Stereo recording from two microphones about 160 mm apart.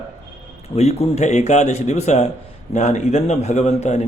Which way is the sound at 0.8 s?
40° left (ahead or behind).